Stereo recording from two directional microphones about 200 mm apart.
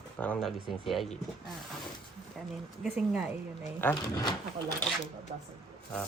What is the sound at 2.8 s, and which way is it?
Speech, centre (ahead or behind).